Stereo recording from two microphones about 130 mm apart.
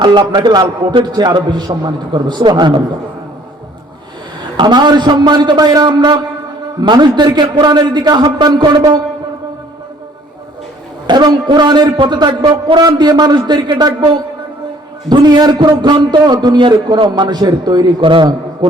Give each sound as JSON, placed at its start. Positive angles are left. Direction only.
{"t": 0.0, "sound": "a man's voice", "side_deg": -35}
{"t": 4.5, "sound": "a man's voice", "side_deg": -35}
{"t": 11.0, "sound": "a man's voice", "side_deg": -35}